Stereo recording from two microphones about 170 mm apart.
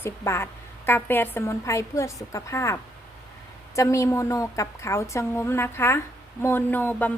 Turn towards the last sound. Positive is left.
turn(degrees=10)  # may be behind; listen again after turning